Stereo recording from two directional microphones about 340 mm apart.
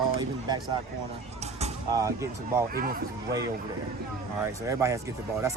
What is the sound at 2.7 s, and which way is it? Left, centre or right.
Speech, right.